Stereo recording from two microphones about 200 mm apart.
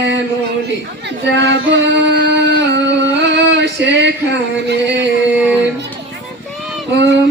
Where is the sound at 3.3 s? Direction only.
60° right (ahead or behind).